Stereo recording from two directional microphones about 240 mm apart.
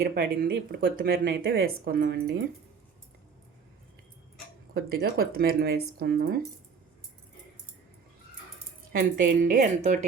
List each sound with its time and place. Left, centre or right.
0.0 s speech: right
4.7 s speech: right
8.9 s speech: right
9.6 s speech: right